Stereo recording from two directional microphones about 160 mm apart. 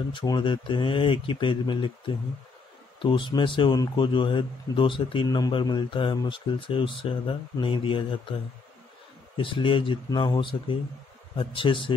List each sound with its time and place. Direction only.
0.1 s speech: 30° left (ahead or behind)
9.4 s speech: 30° left (ahead or behind)